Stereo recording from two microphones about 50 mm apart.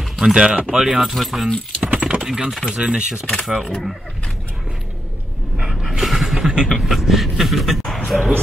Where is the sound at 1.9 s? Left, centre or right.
Centre.